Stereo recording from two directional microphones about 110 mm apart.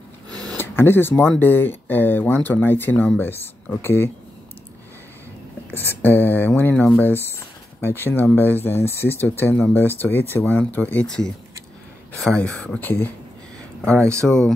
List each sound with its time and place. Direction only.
0.3 s a sound: 35° right (ahead or behind)
0.6 s speech: 20° left (ahead or behind)
5.7 s speech: 20° left (ahead or behind)
14.2 s speech: 5° left (ahead or behind)